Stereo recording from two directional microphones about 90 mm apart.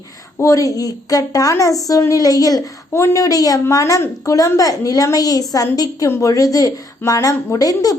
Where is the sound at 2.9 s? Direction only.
30° left (ahead or behind).